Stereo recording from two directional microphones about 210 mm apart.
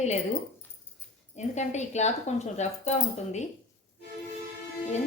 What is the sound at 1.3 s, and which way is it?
Speech, 35° left (ahead or behind).